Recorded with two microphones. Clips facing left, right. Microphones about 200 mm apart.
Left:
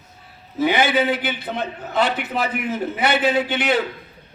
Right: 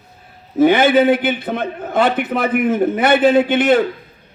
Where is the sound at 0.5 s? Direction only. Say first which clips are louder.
Right 7 dB; 50° right (ahead or behind).